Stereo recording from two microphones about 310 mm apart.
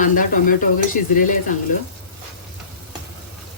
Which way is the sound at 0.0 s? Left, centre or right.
Left.